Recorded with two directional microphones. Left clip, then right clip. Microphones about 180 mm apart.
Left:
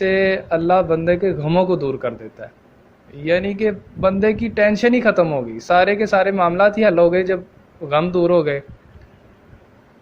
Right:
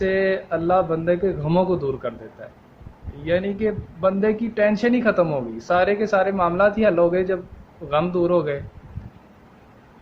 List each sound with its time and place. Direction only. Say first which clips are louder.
0.0 s a man's voice: left 4 dB; 25° left (ahead or behind)
3.2 s a man's voice: left 4 dB; 25° left (ahead or behind)